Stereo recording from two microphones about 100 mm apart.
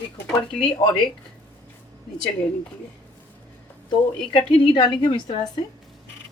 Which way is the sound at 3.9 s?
60° left (ahead or behind).